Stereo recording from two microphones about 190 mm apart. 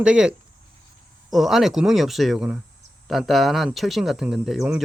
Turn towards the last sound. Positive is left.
turn(degrees=-5)  # may be behind; listen again after turning